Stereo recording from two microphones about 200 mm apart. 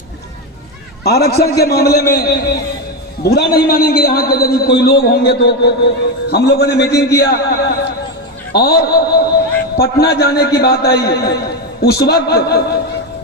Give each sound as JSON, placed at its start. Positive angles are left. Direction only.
{"t": 1.0, "sound": "a man's voice", "side_deg": 55}